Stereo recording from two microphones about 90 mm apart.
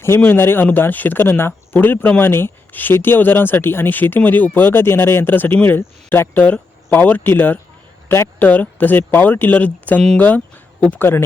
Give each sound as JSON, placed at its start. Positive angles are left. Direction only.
{"t": 0.0, "sound": "speech", "side_deg": 25}